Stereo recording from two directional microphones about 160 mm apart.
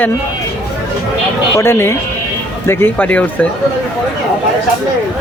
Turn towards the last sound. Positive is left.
turn(degrees=10)  # may be behind; listen again after turning